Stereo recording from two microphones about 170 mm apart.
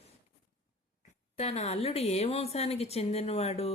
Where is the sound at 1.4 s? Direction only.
40° left (ahead or behind).